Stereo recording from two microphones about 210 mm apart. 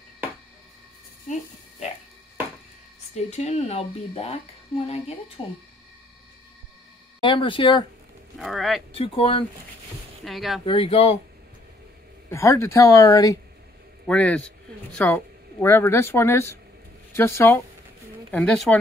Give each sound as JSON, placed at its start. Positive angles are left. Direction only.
{"t": 1.3, "sound": "speech", "side_deg": 35}
{"t": 3.2, "sound": "a woman's voice", "side_deg": 30}
{"t": 7.2, "sound": "a woman's voice", "side_deg": 25}
{"t": 8.4, "sound": "a man's voice", "side_deg": 0}
{"t": 8.9, "sound": "a woman's voice", "side_deg": 25}
{"t": 10.2, "sound": "a man's voice", "side_deg": 0}
{"t": 10.6, "sound": "a woman's voice", "side_deg": 25}
{"t": 12.3, "sound": "speech", "side_deg": 15}
{"t": 14.0, "sound": "a man's voice", "side_deg": 5}